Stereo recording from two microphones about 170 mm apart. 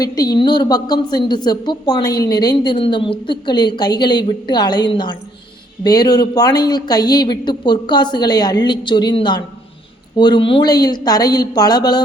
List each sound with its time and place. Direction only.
0.0 s a woman's voice: 25° left (ahead or behind)